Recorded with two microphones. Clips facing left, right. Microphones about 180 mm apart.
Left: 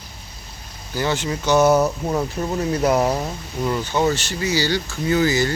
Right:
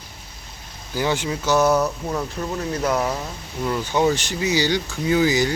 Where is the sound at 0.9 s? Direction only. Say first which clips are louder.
Even; 10° right (ahead or behind).